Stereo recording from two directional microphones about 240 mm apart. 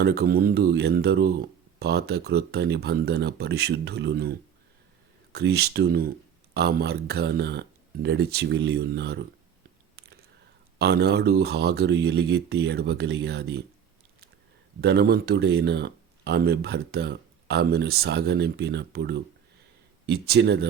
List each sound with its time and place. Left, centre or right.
0.0 s speech: right
10.8 s speech: right
14.8 s speech: right